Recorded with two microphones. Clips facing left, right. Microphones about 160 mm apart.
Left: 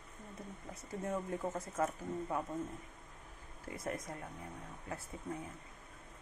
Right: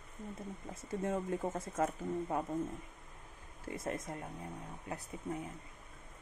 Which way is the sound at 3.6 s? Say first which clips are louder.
Right 2 dB; 25° right (ahead or behind).